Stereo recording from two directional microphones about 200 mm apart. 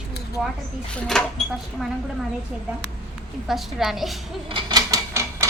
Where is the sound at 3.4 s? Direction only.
Centre (ahead or behind).